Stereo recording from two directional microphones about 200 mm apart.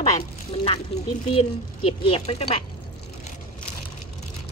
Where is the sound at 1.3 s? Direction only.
30° left (ahead or behind).